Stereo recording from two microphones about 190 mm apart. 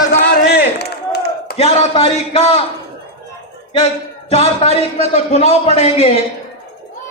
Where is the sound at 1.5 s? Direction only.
35° left (ahead or behind).